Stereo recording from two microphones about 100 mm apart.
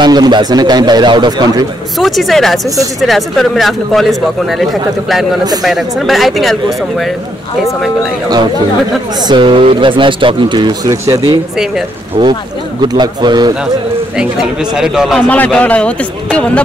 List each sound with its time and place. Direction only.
0.0 s speech: 45° right (ahead or behind)
2.0 s speech: centre (ahead or behind)
9.2 s speech: 55° right (ahead or behind); by 11.3 s 35° right (ahead or behind)
11.5 s speech: 5° right (ahead or behind)
12.2 s speech: 55° right (ahead or behind)
14.1 s speech: 5° right (ahead or behind)
15.2 s speech: 15° left (ahead or behind)